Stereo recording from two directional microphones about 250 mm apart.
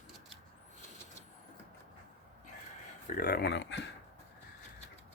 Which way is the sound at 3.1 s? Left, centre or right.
Left.